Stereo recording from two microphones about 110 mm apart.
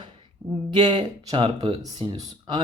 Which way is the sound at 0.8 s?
45° right (ahead or behind).